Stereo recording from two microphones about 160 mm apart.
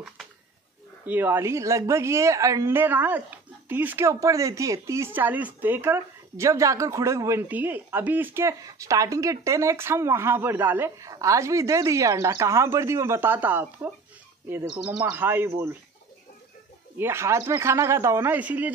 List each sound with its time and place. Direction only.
1.0 s a woman's voice: 10° right (ahead or behind)
14.9 s a woman's voice: 10° right (ahead or behind)
17.0 s a woman's voice: 15° right (ahead or behind)